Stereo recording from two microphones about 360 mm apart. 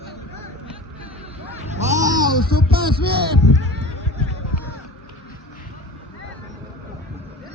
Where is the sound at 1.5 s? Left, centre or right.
Centre.